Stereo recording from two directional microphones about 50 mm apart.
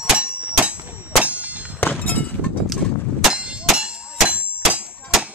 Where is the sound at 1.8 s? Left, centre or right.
Left.